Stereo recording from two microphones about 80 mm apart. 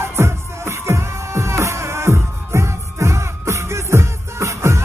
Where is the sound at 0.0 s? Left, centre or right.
Right.